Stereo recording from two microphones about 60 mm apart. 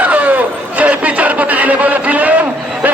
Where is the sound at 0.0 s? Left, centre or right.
Right.